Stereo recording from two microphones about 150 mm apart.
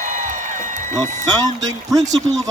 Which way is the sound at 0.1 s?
55° right (ahead or behind).